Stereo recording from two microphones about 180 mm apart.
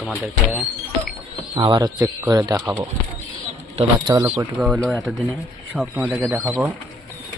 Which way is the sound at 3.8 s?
25° right (ahead or behind).